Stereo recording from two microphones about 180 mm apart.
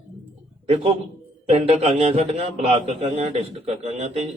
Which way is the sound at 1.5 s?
35° right (ahead or behind).